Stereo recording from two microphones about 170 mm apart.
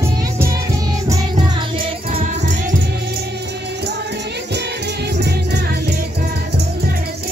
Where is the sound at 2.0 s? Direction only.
40° right (ahead or behind).